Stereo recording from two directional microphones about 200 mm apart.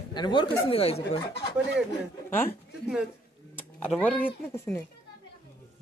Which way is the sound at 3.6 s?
5° left (ahead or behind).